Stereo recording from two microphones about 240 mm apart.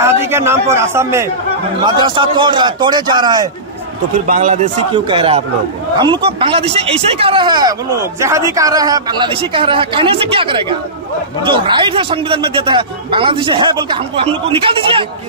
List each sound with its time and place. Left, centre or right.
0.0 s a man's voice: centre
4.3 s a man's voice: right